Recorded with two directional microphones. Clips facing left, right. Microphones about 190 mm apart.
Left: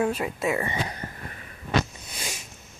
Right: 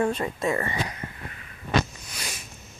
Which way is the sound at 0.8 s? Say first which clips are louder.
Left 1 dB; 35° left (ahead or behind).